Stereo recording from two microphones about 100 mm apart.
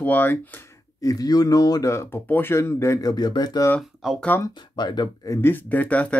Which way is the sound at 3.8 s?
5° right (ahead or behind).